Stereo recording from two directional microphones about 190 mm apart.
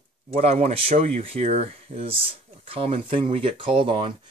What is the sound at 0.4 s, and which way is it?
Speech, 35° right (ahead or behind).